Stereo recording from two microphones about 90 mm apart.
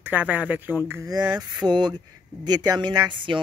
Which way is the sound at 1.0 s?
45° right (ahead or behind).